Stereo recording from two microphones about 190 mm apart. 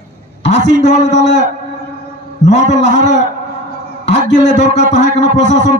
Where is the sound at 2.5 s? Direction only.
40° left (ahead or behind).